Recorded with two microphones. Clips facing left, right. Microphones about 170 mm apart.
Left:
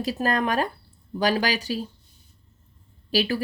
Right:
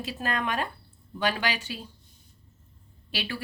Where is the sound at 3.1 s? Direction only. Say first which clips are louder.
Left 10 dB; 40° left (ahead or behind).